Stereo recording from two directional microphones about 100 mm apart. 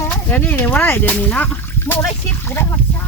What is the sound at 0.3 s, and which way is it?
Speech, 20° left (ahead or behind).